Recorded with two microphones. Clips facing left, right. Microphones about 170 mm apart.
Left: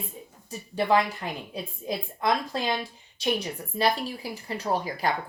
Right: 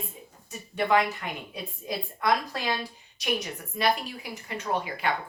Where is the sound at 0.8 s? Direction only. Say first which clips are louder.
Left 1 dB; 30° left (ahead or behind).